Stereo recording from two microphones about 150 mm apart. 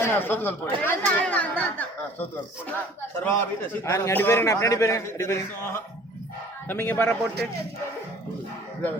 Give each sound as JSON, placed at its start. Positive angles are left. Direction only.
{"t": 0.0, "sound": "a man's voice", "side_deg": 15}